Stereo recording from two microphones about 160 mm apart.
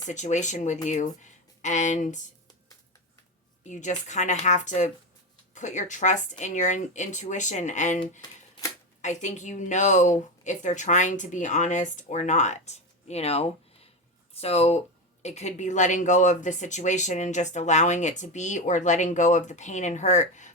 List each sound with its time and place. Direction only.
0.1 s speech: 50° left (ahead or behind)
3.6 s speech: 50° left (ahead or behind)
9.0 s speech: 50° left (ahead or behind)